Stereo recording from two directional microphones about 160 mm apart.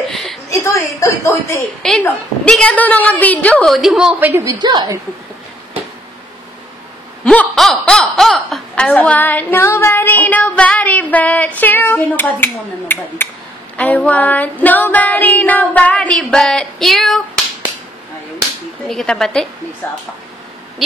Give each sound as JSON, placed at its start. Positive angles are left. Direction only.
{"t": 0.1, "sound": "a sound", "side_deg": 0}
{"t": 0.5, "sound": "a sound", "side_deg": 15}
{"t": 1.8, "sound": "a woman's voice", "side_deg": 5}
{"t": 2.0, "sound": "female singing", "side_deg": 5}
{"t": 4.3, "sound": "a woman's voice", "side_deg": -25}
{"t": 7.2, "sound": "speech", "side_deg": 5}
{"t": 13.7, "sound": "female singing", "side_deg": 10}
{"t": 18.9, "sound": "a woman's voice", "side_deg": 0}